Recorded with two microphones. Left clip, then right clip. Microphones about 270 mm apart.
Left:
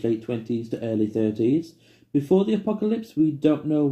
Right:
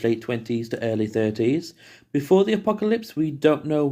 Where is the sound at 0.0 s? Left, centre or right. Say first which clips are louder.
Right 2 dB; right.